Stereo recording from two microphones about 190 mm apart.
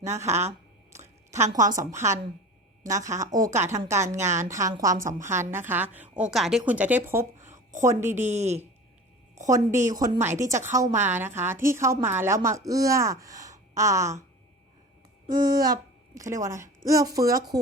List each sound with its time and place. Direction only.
0.0 s a woman's voice: 15° right (ahead or behind)
0.3 s a woman's voice: 35° right (ahead or behind)
1.9 s a woman's voice: 15° right (ahead or behind)
8.2 s a woman's voice: 35° right (ahead or behind)
9.9 s a woman's voice: 15° right (ahead or behind)
15.3 s a child's voice: 20° right (ahead or behind)